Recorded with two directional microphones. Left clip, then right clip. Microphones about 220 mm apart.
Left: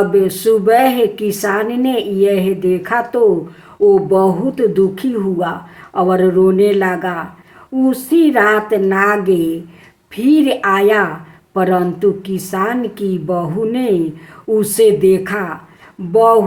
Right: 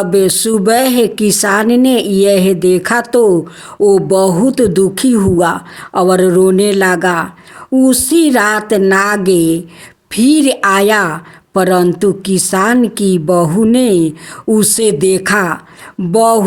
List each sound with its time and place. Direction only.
0.1 s a woman's voice: 50° right (ahead or behind)